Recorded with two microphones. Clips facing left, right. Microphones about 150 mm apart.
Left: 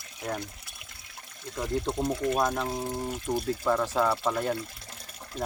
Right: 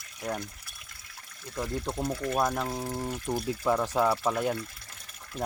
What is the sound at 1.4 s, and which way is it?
Speech, 25° left (ahead or behind).